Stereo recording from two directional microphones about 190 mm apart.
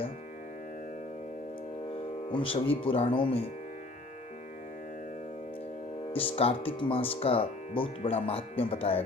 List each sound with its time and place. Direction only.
2.3 s speech: 30° left (ahead or behind)
6.1 s speech: 30° left (ahead or behind)